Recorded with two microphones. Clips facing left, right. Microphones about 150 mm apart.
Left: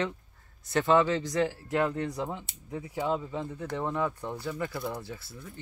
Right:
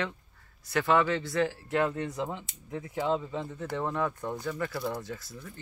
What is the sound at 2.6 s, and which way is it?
Speech, 10° left (ahead or behind).